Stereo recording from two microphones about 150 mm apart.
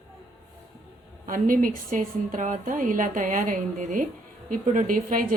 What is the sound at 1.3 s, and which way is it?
A woman's voice, 65° right (ahead or behind).